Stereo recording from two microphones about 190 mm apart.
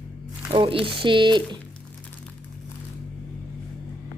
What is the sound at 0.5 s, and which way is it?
Speech, 25° right (ahead or behind).